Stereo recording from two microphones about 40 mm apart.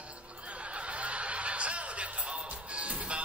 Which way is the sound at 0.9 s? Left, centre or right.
Right.